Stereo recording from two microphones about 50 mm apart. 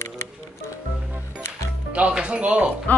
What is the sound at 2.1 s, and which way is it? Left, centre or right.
Speech, right.